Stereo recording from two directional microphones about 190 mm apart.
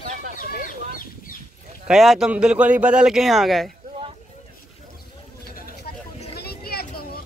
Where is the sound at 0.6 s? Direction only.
45° left (ahead or behind).